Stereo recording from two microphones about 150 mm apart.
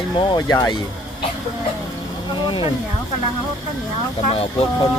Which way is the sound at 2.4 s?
35° left (ahead or behind).